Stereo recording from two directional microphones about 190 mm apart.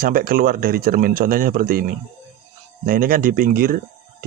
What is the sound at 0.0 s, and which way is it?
Speech, 50° right (ahead or behind).